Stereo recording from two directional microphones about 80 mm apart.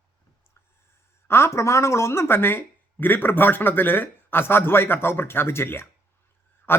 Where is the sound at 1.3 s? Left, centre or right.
Left.